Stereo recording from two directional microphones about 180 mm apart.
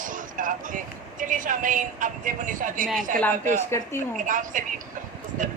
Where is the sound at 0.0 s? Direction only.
45° right (ahead or behind).